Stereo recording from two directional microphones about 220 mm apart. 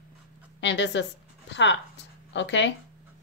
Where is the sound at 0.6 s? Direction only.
55° left (ahead or behind).